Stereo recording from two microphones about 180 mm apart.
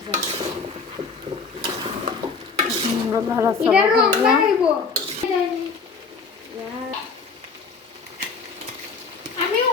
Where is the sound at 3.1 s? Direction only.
15° right (ahead or behind).